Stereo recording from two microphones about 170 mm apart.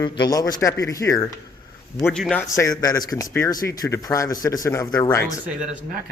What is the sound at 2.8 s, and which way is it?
Speech, 20° left (ahead or behind).